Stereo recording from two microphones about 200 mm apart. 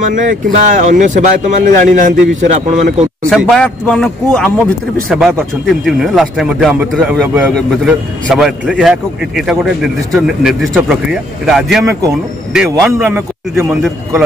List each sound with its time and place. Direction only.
0.0 s speech: 40° right (ahead or behind)
3.3 s a man's voice: centre (ahead or behind)